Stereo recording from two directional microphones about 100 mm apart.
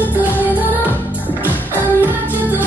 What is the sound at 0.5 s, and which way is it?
Music, 15° right (ahead or behind).